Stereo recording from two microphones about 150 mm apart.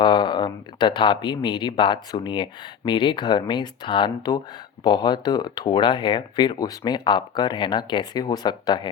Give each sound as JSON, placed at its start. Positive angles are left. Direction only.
{"t": 0.0, "sound": "speech", "side_deg": 30}